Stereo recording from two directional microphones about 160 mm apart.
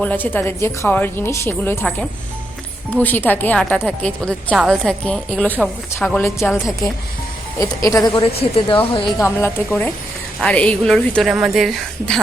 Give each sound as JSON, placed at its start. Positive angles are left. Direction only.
{"t": 0.0, "sound": "a woman's voice", "side_deg": 10}
{"t": 6.1, "sound": "a woman's voice", "side_deg": 15}
{"t": 7.6, "sound": "speech", "side_deg": 20}
{"t": 8.5, "sound": "a woman's voice", "side_deg": 35}
{"t": 9.2, "sound": "a woman's voice", "side_deg": 15}